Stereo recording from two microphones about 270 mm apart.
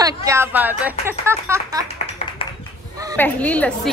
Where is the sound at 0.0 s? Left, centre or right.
Centre.